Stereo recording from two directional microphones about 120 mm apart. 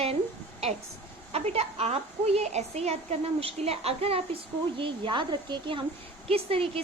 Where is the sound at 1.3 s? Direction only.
60° right (ahead or behind).